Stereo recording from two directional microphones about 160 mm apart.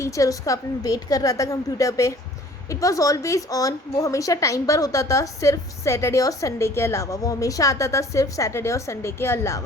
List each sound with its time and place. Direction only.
0.0 s a woman's voice: 20° left (ahead or behind)